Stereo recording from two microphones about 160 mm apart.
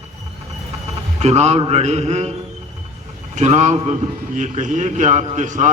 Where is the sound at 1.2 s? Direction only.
45° right (ahead or behind).